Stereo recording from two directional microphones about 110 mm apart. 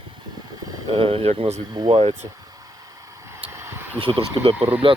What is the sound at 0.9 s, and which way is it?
Speech, 65° right (ahead or behind).